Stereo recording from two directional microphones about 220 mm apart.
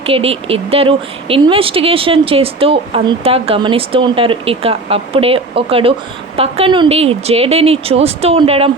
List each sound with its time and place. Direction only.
0.0 s speech: 25° right (ahead or behind)